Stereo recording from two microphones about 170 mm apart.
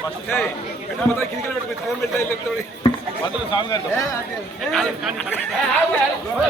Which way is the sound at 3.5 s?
25° left (ahead or behind).